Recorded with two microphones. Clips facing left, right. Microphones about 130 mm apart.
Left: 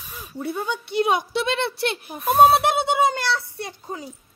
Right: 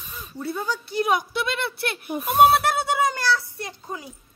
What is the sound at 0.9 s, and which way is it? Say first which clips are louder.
Speech: left 2 dB; 30° left (ahead or behind).